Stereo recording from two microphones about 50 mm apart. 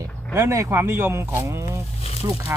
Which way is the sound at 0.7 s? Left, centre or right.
Right.